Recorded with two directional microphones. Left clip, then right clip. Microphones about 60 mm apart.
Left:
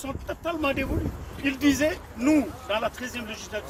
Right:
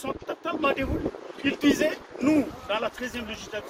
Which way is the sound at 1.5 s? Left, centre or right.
Centre.